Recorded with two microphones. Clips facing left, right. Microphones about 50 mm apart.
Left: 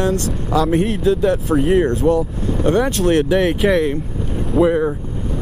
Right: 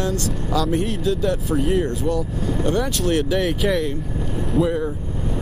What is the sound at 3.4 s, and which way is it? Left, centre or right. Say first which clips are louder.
Speech: left 5 dB; centre.